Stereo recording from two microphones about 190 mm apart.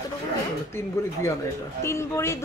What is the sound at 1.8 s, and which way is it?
Speech, 15° left (ahead or behind).